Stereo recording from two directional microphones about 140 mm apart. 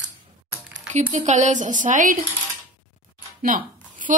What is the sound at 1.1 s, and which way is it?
A woman's voice, 60° right (ahead or behind).